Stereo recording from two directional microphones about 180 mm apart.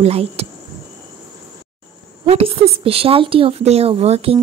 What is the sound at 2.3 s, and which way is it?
Speech, 35° right (ahead or behind).